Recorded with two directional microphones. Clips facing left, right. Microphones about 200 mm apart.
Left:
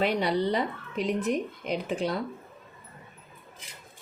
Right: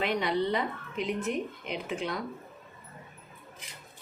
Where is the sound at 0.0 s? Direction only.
35° left (ahead or behind).